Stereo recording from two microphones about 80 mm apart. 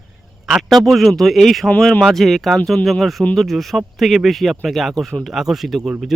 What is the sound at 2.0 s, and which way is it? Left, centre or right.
Speech, centre.